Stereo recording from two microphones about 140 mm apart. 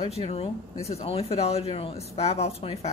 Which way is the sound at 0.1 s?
45° left (ahead or behind).